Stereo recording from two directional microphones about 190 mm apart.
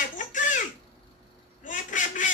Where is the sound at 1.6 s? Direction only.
40° left (ahead or behind).